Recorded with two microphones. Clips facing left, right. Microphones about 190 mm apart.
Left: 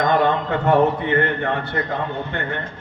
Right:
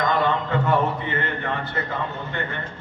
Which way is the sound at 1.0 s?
55° left (ahead or behind).